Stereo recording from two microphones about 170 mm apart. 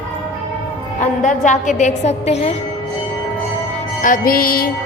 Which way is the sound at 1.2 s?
45° left (ahead or behind).